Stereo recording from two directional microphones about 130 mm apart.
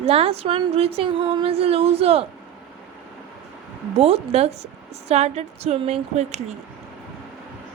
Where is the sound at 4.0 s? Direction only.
50° right (ahead or behind).